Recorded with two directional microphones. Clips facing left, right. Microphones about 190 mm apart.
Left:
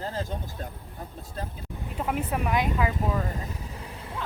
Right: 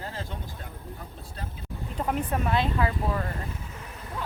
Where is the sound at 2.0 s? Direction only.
5° left (ahead or behind).